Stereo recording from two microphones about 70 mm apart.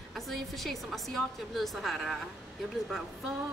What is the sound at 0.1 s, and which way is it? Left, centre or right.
Speech, centre.